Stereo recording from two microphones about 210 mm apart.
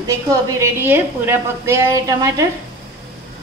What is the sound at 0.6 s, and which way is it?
A woman's voice, 10° right (ahead or behind).